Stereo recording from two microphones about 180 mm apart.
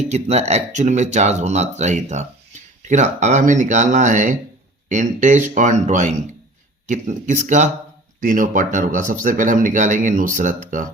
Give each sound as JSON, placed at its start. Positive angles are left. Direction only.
{"t": 0.1, "sound": "speech", "side_deg": -40}